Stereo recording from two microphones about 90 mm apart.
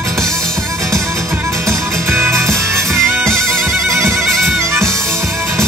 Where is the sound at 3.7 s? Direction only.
30° right (ahead or behind).